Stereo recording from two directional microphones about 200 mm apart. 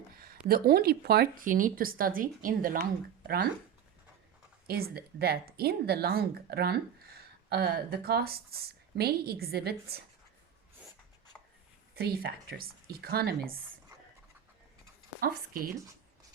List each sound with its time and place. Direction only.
0.4 s speech: 50° right (ahead or behind)
4.6 s speech: 50° right (ahead or behind)
11.9 s speech: 50° right (ahead or behind)